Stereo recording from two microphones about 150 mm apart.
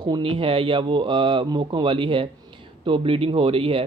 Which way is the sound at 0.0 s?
35° right (ahead or behind).